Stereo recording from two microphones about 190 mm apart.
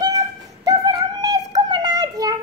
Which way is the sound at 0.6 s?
20° right (ahead or behind).